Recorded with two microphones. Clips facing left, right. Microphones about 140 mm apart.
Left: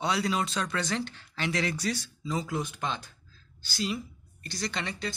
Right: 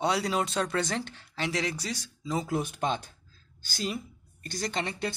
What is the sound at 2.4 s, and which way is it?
Speech, 55° right (ahead or behind).